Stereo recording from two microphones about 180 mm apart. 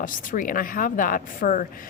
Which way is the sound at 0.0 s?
50° left (ahead or behind).